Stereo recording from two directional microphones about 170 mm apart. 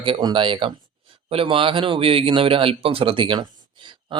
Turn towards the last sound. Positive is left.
turn(degrees=-25)  # may be behind; listen again after turning